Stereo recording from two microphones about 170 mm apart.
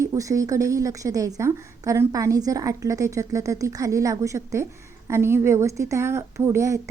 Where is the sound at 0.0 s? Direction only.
20° right (ahead or behind).